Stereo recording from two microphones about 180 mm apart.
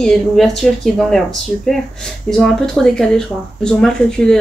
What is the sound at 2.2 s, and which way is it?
A woman's voice, centre (ahead or behind).